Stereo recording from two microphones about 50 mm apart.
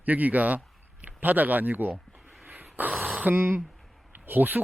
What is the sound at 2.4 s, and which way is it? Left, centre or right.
Dog, right.